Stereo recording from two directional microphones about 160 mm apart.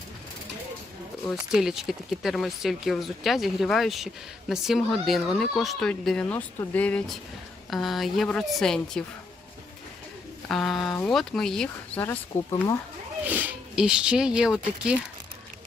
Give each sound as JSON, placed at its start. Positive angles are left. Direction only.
{"t": 1.5, "sound": "speech", "side_deg": -5}
{"t": 10.5, "sound": "speech", "side_deg": 0}
{"t": 11.9, "sound": "speech", "side_deg": 15}
{"t": 13.2, "sound": "speech", "side_deg": -10}